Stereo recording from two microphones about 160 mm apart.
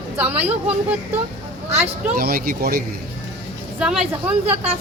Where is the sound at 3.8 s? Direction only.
5° right (ahead or behind).